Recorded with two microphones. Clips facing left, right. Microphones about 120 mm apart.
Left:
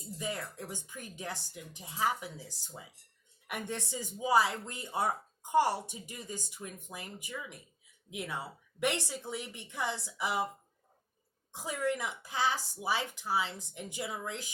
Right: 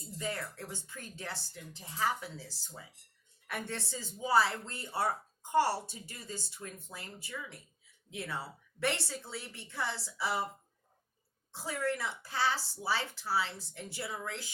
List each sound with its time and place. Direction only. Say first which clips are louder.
0.2 s speech: even; 15° left (ahead or behind)
11.5 s speech: left 1 dB; 15° left (ahead or behind)